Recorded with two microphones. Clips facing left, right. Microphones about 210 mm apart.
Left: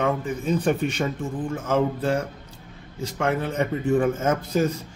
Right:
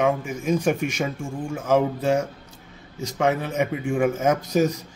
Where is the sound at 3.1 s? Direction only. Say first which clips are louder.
Right 2 dB; 10° right (ahead or behind).